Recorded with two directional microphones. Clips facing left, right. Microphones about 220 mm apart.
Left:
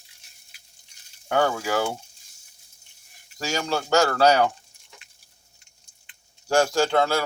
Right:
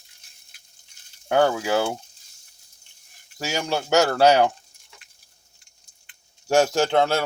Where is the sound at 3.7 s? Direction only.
15° right (ahead or behind).